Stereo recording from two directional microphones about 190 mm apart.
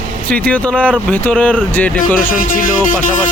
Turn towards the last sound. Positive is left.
turn(degrees=45)  # may be behind; listen again after turning